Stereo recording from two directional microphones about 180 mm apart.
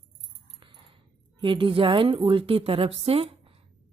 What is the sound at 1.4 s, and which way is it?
Speech, 30° right (ahead or behind).